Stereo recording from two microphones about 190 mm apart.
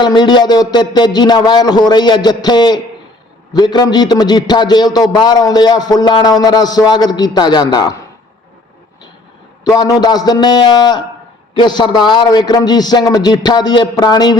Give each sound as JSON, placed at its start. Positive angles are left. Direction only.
{"t": 0.0, "sound": "a man's voice", "side_deg": 25}
{"t": 9.6, "sound": "a man's voice", "side_deg": 20}